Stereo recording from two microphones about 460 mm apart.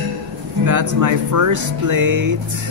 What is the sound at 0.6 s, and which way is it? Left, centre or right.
Speech, right.